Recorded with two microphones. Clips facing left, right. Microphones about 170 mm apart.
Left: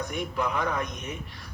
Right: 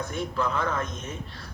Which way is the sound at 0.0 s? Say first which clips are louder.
Right 1 dB; 15° left (ahead or behind).